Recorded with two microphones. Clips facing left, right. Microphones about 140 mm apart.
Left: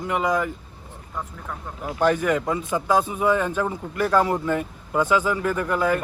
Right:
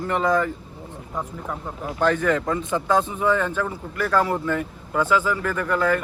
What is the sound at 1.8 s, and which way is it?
Speech, 15° left (ahead or behind).